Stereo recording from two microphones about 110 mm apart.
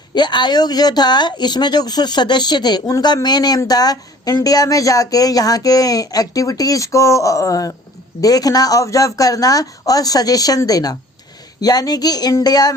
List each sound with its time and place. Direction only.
0.1 s speech: 40° left (ahead or behind)